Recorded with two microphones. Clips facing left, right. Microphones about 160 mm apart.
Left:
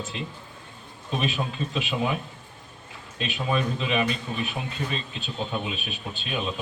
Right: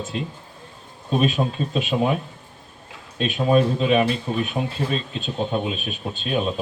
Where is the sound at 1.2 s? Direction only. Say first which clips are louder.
Right 6 dB; 40° right (ahead or behind).